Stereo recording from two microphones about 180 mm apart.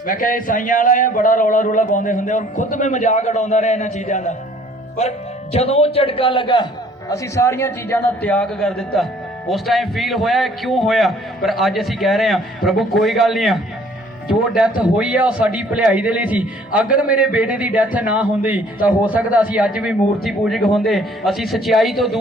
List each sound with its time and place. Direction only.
0.1 s a man's voice: 50° left (ahead or behind); by 6.7 s 25° left (ahead or behind)
7.1 s a man's voice: 15° left (ahead or behind); by 22.2 s centre (ahead or behind)